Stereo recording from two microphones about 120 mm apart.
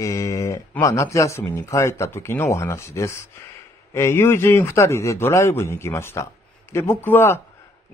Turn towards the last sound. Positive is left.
turn(degrees=20)  # may be behind; listen again after turning